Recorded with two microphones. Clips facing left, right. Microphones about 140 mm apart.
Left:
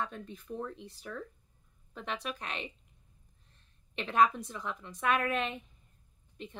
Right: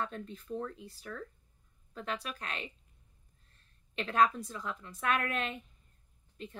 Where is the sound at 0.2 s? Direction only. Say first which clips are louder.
Right 1 dB; 20° left (ahead or behind).